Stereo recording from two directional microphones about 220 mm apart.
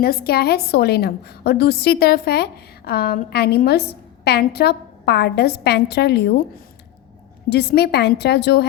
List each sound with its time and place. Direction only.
0.0 s a woman's voice: 45° left (ahead or behind)
7.5 s a woman's voice: 45° left (ahead or behind)